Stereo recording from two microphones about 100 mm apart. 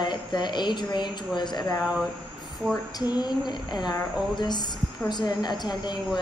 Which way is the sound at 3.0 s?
45° left (ahead or behind).